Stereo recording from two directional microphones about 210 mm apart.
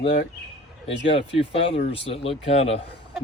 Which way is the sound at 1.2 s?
25° left (ahead or behind).